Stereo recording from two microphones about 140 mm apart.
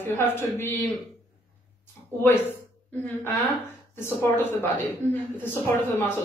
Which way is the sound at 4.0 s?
15° left (ahead or behind).